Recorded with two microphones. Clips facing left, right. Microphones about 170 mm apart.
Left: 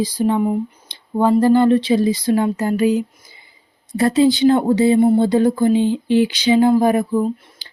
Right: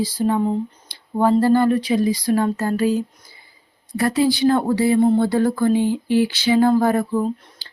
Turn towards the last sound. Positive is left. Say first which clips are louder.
# left 2 dB
turn(degrees=15)  # may be behind; listen again after turning